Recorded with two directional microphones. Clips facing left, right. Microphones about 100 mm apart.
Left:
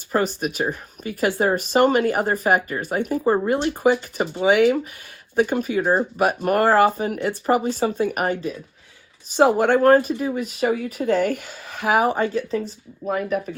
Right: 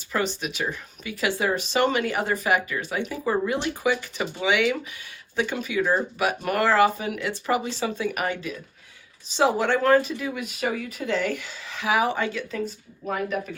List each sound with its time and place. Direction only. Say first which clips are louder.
0.1 s speech: left 5 dB; 45° left (ahead or behind)
9.3 s speech: left 5 dB; 50° left (ahead or behind)
13.0 s speech: left 4 dB; 25° left (ahead or behind)